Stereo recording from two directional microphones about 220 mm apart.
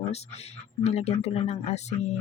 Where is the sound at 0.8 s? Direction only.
30° left (ahead or behind).